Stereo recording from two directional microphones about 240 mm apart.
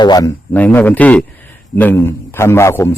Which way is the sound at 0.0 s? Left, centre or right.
Centre.